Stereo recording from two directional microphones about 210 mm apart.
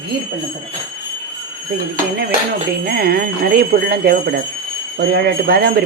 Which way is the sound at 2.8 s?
45° right (ahead or behind).